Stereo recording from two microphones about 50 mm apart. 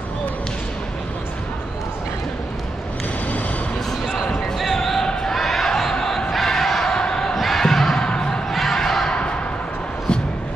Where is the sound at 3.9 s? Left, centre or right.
Centre.